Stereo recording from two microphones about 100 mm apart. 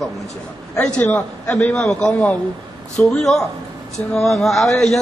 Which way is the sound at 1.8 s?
5° left (ahead or behind).